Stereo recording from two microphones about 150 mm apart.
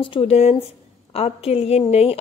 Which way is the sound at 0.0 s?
35° left (ahead or behind).